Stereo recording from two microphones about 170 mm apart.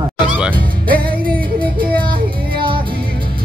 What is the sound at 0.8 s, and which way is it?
Music, 55° right (ahead or behind).